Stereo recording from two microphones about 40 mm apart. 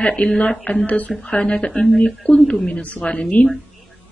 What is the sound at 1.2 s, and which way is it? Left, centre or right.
Speech, left.